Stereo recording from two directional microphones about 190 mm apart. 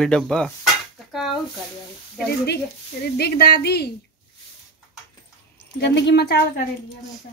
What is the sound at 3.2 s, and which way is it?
Speech, 55° left (ahead or behind).